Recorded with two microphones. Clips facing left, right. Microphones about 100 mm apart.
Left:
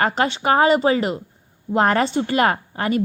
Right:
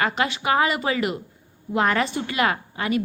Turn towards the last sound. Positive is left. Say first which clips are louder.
# left 3 dB
turn(degrees=40)  # may be behind; listen again after turning